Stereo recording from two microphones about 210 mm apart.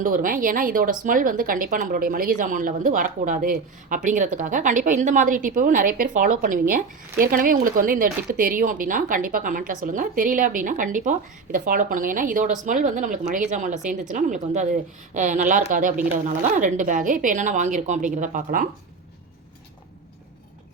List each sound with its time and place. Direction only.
0.0 s speech: 40° right (ahead or behind)